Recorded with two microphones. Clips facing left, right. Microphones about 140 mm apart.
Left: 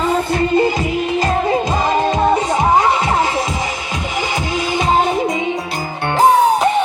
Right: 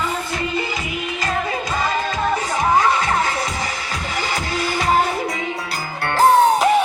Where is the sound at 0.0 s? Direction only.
30° left (ahead or behind).